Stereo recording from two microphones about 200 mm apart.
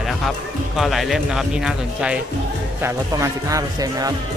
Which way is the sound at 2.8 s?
15° right (ahead or behind).